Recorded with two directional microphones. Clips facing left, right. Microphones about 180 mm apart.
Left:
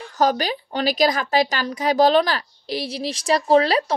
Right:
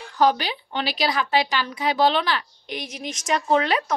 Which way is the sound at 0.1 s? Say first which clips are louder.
Even; 45° left (ahead or behind).